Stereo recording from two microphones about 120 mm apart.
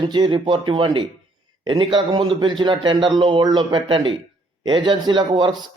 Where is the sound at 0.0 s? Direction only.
40° right (ahead or behind).